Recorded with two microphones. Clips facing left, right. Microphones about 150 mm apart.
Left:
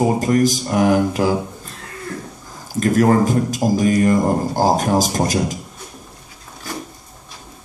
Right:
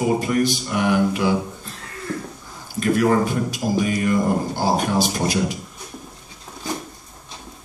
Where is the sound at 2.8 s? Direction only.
40° left (ahead or behind).